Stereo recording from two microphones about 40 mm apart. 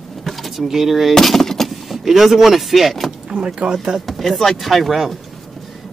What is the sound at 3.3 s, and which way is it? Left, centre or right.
Speech, right.